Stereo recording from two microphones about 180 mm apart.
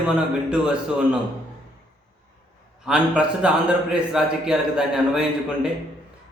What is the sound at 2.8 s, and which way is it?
Speech, 5° right (ahead or behind).